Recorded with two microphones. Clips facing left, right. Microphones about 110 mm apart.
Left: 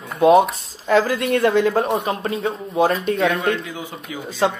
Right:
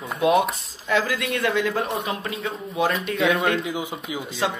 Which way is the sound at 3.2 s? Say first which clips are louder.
Left 1 dB; centre (ahead or behind).